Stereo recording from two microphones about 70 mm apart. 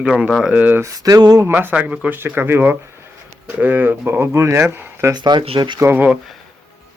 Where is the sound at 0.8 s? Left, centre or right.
Right.